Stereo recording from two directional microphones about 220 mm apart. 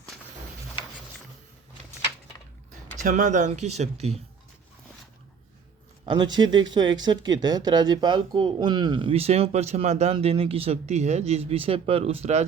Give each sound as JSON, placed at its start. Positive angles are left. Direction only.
{"t": 3.0, "sound": "speech", "side_deg": -35}
{"t": 6.1, "sound": "speech", "side_deg": -20}